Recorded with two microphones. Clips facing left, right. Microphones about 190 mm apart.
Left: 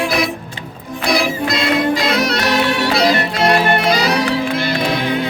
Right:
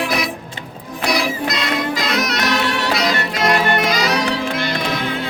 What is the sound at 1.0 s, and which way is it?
Music, 30° left (ahead or behind).